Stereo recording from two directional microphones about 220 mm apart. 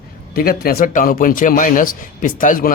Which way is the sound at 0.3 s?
40° left (ahead or behind).